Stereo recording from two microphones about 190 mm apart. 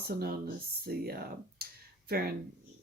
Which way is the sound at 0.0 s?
55° right (ahead or behind).